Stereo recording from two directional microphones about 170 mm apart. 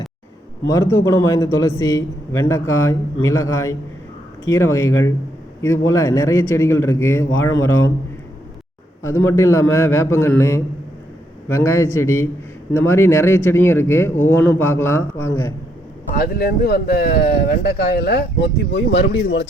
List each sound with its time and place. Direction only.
0.7 s a man's voice: 15° left (ahead or behind)
9.0 s a man's voice: 15° left (ahead or behind)
16.1 s speech: 60° left (ahead or behind); by 19.5 s 90° left